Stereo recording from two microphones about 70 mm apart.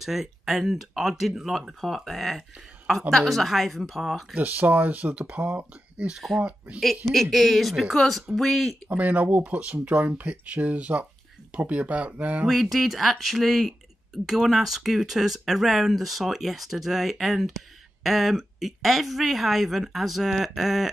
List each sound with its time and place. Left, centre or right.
0.0 s speech: centre
4.3 s speech: right
6.1 s speech: centre
8.8 s speech: right
12.4 s speech: centre